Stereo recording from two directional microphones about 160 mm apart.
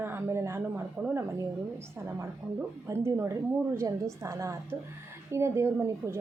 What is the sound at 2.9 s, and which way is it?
A woman's voice, 15° right (ahead or behind).